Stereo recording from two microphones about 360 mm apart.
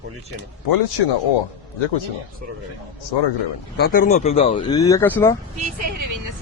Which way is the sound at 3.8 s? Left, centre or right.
Left.